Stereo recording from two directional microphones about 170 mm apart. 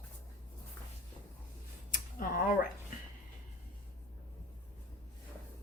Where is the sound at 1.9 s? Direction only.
55° left (ahead or behind).